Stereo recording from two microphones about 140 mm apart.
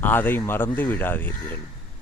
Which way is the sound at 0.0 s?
15° left (ahead or behind).